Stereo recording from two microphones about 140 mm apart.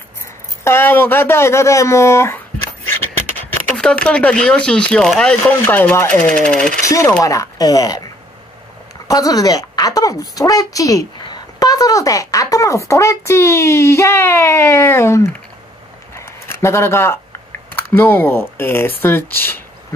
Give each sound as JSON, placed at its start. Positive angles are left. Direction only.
{"t": 0.7, "sound": "speech", "side_deg": 15}
{"t": 3.7, "sound": "speech", "side_deg": 5}
{"t": 7.2, "sound": "speech", "side_deg": 25}
{"t": 9.0, "sound": "a woman's voice", "side_deg": 25}
{"t": 16.2, "sound": "a sound", "side_deg": 20}
{"t": 17.9, "sound": "speech", "side_deg": 15}